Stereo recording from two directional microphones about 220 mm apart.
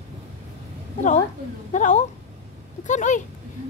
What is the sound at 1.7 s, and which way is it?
A woman's voice, 35° left (ahead or behind).